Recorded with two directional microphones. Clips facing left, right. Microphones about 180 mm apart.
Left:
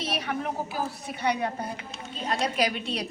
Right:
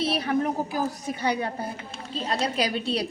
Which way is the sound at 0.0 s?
30° right (ahead or behind).